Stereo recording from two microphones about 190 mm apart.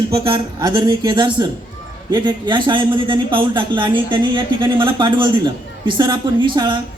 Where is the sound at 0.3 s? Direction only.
25° right (ahead or behind).